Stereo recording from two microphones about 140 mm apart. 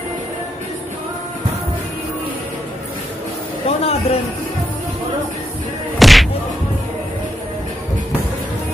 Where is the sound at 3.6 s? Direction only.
45° left (ahead or behind).